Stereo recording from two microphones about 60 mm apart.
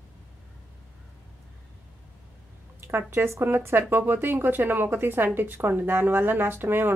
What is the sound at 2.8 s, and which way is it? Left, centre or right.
Speech, right.